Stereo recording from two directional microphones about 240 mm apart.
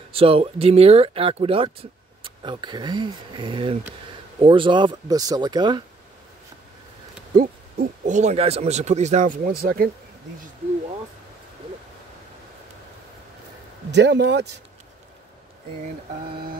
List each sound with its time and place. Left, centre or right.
0.1 s speech: right
7.3 s speech: right
13.9 s speech: right